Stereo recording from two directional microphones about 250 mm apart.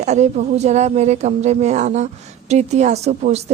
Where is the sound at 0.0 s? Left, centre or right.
Right.